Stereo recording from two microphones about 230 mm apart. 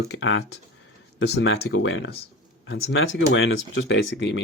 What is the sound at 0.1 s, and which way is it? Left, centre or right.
Speech, left.